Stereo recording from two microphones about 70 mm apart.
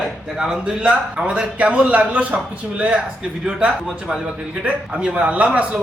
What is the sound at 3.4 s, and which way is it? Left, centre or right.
A man's voice, centre.